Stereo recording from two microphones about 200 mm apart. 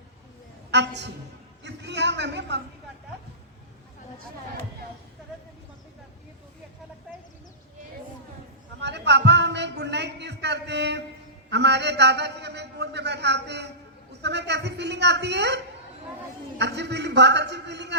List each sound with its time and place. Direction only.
0.7 s a man's voice: 60° right (ahead or behind)
8.8 s a man's voice: 60° right (ahead or behind)